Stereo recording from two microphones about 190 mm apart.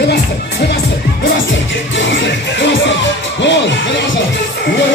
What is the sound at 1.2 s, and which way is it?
Music, 75° left (ahead or behind).